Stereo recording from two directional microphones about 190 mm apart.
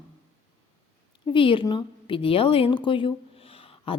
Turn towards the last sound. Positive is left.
turn(degrees=30)  # may be behind; listen again after turning